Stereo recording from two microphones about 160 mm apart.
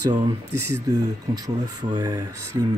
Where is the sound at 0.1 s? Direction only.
20° right (ahead or behind).